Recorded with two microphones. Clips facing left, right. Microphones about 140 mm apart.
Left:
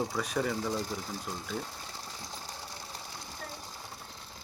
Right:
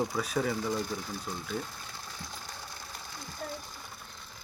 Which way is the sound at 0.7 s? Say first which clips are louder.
Right 1 dB; 35° left (ahead or behind).